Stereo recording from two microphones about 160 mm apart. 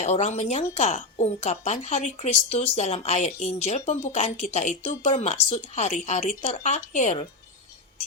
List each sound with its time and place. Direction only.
0.0 s speech: 45° left (ahead or behind)